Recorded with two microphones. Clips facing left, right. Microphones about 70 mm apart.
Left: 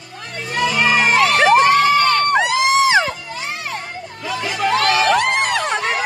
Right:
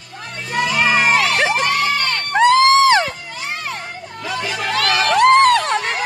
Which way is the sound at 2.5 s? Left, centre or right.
Centre.